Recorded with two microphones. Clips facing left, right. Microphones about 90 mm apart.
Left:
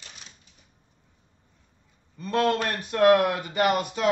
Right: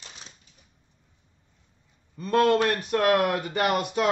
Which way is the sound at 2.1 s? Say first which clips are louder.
Right 3 dB; 40° right (ahead or behind).